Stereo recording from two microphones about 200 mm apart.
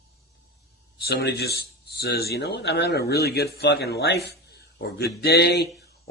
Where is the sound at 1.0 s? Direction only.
55° left (ahead or behind).